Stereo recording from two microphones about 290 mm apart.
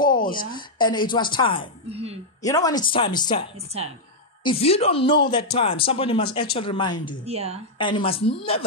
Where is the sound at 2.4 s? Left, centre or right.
Centre.